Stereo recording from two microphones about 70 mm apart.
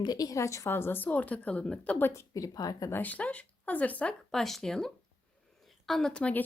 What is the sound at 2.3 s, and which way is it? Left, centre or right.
Speech, left.